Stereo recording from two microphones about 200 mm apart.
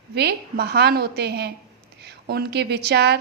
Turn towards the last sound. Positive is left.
turn(degrees=-55)  # may be behind; listen again after turning